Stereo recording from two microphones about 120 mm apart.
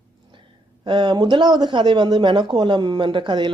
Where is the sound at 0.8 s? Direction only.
40° right (ahead or behind).